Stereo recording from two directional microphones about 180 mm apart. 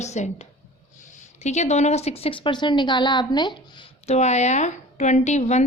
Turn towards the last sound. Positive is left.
turn(degrees=40)  # may be behind; listen again after turning